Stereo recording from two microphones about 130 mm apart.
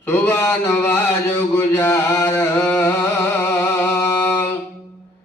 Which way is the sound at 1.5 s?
15° left (ahead or behind).